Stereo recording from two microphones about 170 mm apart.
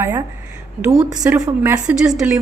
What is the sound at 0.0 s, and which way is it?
A woman's voice, 20° right (ahead or behind).